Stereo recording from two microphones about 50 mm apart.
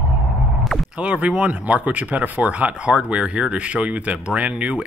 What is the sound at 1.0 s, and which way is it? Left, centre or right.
Speech, right.